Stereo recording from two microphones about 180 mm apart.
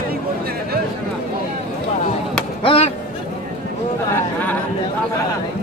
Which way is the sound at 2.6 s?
30° left (ahead or behind).